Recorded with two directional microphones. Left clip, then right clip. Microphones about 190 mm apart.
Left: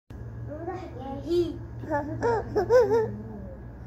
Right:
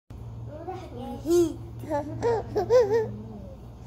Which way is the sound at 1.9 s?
20° right (ahead or behind).